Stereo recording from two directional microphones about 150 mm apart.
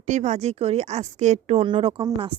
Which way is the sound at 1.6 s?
35° right (ahead or behind).